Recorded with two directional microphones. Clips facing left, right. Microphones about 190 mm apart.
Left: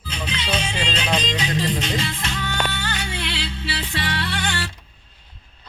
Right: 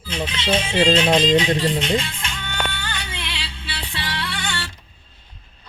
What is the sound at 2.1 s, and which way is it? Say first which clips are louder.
Music: left 3 dB; 40° left (ahead or behind).